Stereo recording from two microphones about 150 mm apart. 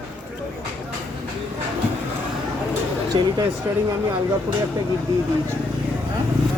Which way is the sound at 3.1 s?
35° right (ahead or behind).